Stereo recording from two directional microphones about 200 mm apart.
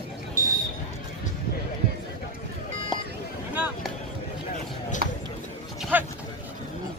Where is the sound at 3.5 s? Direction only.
10° right (ahead or behind).